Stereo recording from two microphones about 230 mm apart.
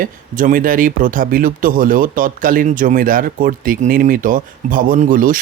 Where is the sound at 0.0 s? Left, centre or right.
Right.